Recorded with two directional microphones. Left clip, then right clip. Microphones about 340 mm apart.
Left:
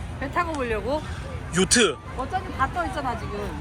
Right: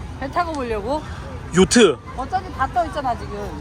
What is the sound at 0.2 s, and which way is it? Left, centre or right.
Speech, right.